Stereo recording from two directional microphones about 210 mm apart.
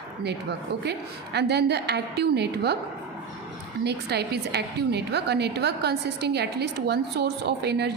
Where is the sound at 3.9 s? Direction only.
50° right (ahead or behind).